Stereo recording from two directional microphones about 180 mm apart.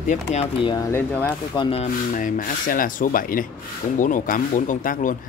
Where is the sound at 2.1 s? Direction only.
50° left (ahead or behind).